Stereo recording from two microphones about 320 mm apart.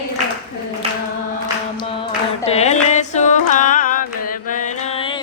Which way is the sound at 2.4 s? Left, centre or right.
Centre.